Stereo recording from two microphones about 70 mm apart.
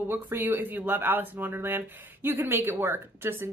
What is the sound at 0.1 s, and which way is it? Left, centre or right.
Speech, right.